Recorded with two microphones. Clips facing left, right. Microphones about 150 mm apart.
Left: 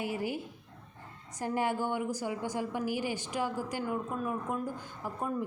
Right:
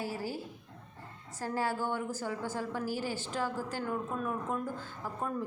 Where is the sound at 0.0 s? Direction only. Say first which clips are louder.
Left 3 dB; 20° left (ahead or behind).